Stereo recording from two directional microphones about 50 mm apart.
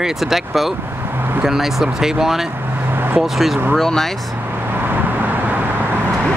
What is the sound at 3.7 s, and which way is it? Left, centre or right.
Speech, centre.